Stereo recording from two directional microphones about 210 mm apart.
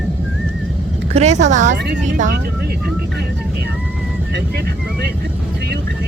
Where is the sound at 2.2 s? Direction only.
40° right (ahead or behind).